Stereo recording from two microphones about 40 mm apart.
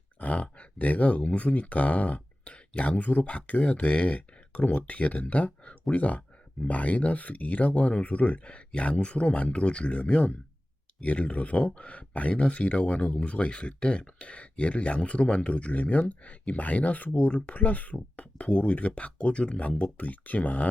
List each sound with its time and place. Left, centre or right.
0.2 s speech: left